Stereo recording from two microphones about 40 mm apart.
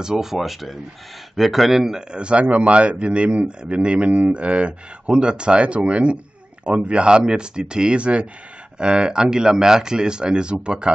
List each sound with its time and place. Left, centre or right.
0.0 s speech: centre
2.0 s speech: right